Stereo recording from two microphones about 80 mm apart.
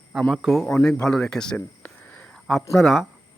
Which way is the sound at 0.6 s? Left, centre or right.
Centre.